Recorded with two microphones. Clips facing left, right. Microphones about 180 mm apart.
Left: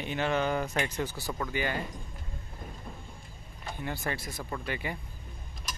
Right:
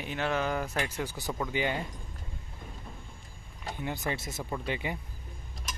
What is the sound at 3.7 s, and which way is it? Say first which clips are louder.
Speech: right 1 dB; 20° right (ahead or behind).